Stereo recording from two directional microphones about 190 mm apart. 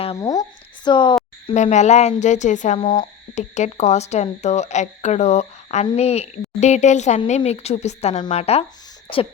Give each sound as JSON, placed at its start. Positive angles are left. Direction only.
{"t": 0.2, "sound": "speech", "side_deg": 20}
{"t": 0.9, "sound": "a sound", "side_deg": 25}
{"t": 1.5, "sound": "speech", "side_deg": 40}
{"t": 2.8, "sound": "speech", "side_deg": 25}